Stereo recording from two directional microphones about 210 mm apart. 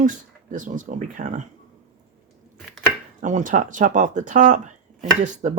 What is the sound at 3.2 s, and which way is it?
Speech, 35° right (ahead or behind).